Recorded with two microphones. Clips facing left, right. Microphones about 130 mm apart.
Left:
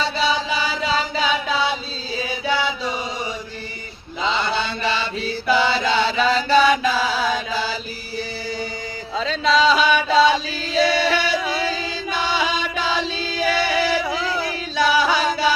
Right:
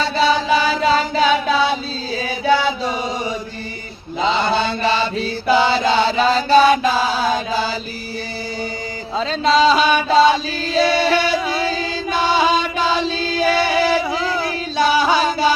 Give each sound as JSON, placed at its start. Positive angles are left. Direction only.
{"t": 0.0, "sound": "chant", "side_deg": -50}
{"t": 4.2, "sound": "mantra", "side_deg": -40}
{"t": 5.5, "sound": "chant", "side_deg": -30}
{"t": 9.1, "sound": "music", "side_deg": -35}
{"t": 10.8, "sound": "chant", "side_deg": -35}